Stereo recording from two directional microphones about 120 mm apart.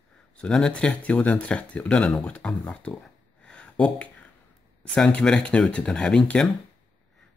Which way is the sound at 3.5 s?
10° left (ahead or behind).